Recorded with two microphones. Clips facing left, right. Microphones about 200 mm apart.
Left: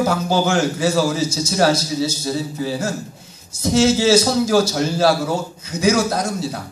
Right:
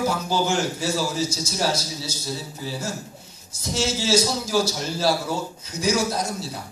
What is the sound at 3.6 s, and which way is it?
A man's voice, 70° left (ahead or behind).